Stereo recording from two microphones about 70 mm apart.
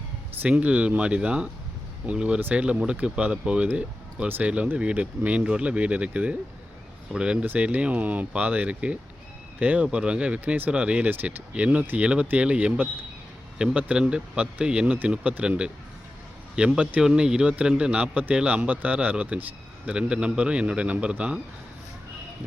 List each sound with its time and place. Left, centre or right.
0.4 s speech: right